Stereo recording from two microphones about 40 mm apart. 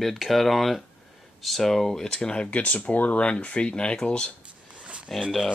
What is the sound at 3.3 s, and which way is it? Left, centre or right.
Speech, left.